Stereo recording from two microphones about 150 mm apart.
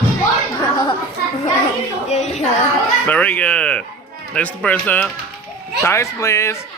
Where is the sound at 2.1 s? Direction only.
50° left (ahead or behind).